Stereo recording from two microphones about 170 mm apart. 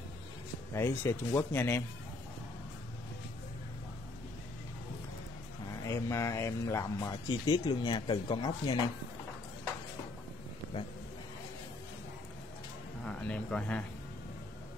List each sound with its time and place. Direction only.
0.7 s speech: 15° left (ahead or behind)
5.9 s speech: 15° left (ahead or behind)
13.0 s a sound: 5° left (ahead or behind)